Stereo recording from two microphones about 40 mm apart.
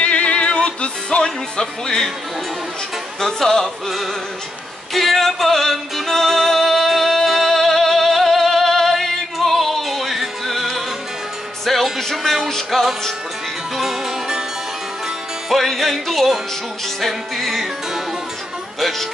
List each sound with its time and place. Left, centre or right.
0.0 s music: left
3.2 s speech: centre
3.6 s music: centre
13.7 s music: centre
15.5 s music: centre